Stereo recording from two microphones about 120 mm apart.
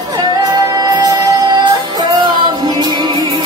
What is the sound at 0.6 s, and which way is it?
Music, 30° right (ahead or behind).